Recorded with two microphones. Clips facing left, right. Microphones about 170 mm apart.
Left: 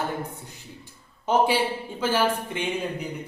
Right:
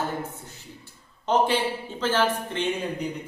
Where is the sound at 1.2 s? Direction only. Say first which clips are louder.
Left 1 dB; 10° left (ahead or behind).